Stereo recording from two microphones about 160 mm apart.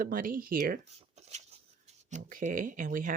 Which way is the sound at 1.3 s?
45° right (ahead or behind).